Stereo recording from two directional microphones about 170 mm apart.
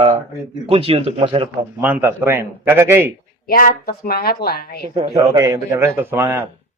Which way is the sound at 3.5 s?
60° left (ahead or behind).